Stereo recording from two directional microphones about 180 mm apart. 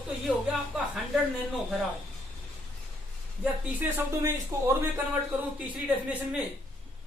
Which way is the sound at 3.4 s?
10° right (ahead or behind).